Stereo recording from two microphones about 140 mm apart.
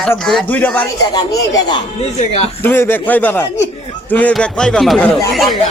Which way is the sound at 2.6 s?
15° left (ahead or behind).